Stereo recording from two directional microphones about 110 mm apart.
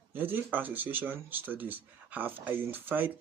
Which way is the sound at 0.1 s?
15° right (ahead or behind).